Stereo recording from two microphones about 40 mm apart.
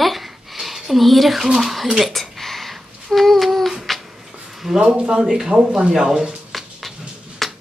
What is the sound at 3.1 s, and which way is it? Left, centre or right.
Speech, centre.